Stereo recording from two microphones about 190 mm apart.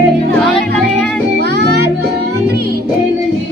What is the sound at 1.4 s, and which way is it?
Music, 60° right (ahead or behind).